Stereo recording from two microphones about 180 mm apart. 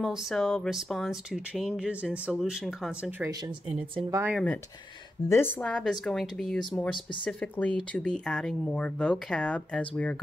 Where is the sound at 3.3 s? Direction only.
30° right (ahead or behind).